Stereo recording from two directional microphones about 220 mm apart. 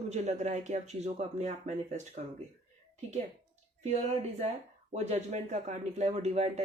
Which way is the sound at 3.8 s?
30° right (ahead or behind).